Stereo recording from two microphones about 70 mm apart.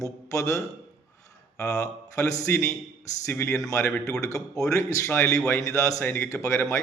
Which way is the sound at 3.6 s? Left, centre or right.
Left.